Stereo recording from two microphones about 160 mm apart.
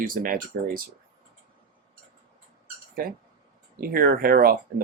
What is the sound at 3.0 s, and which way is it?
Speech, 65° right (ahead or behind).